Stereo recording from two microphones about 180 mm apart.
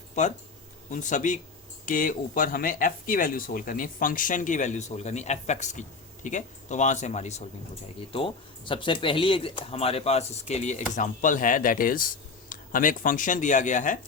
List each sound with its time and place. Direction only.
0.2 s speech: 40° left (ahead or behind)
8.1 s speech: 30° left (ahead or behind); by 14.0 s 45° left (ahead or behind)